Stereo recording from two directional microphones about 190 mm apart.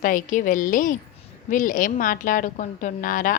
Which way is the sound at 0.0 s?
45° left (ahead or behind).